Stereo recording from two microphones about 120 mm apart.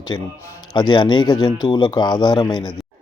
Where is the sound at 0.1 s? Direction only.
35° left (ahead or behind).